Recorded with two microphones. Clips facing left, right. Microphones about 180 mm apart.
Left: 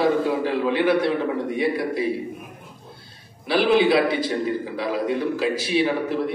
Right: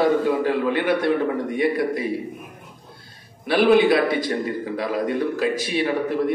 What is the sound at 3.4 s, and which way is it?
A man's voice, 50° right (ahead or behind).